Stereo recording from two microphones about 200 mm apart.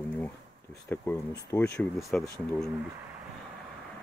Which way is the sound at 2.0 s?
Centre (ahead or behind).